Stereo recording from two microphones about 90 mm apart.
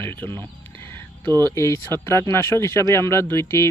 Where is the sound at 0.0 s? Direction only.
25° left (ahead or behind).